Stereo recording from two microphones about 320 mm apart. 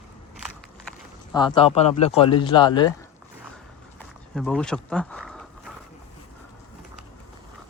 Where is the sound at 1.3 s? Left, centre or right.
Centre.